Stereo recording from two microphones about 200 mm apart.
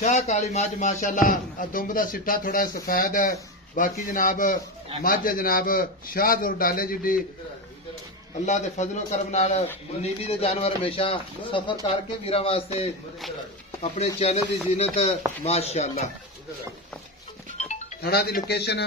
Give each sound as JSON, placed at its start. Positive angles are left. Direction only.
{"t": 0.0, "sound": "speech", "side_deg": 35}
{"t": 8.5, "sound": "a man's voice", "side_deg": 35}
{"t": 13.8, "sound": "a man's voice", "side_deg": 30}
{"t": 18.0, "sound": "speech", "side_deg": 50}